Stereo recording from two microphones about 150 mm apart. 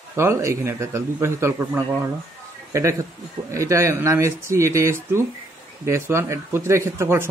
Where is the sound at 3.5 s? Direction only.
20° right (ahead or behind).